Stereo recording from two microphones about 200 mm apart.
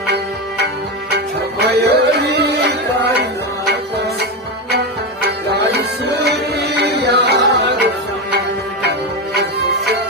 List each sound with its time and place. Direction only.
1.1 s music: 55° right (ahead or behind)
8.8 s music: 55° right (ahead or behind)